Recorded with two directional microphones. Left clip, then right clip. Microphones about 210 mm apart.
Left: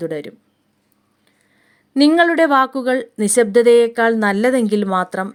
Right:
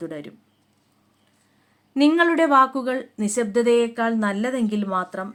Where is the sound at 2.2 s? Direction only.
35° left (ahead or behind).